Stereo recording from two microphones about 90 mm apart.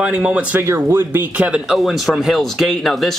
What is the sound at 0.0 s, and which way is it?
Speech, 15° right (ahead or behind).